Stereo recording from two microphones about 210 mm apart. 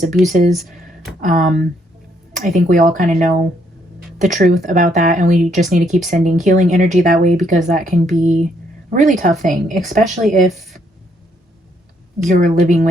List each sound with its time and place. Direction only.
0.1 s speech: 40° right (ahead or behind)
0.5 s speech: centre (ahead or behind)
1.2 s speech: 40° right (ahead or behind)
12.2 s speech: 40° right (ahead or behind)